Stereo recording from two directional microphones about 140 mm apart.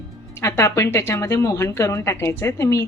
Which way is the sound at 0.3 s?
20° left (ahead or behind).